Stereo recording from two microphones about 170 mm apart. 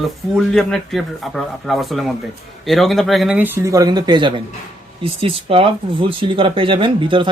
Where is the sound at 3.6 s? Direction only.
20° right (ahead or behind).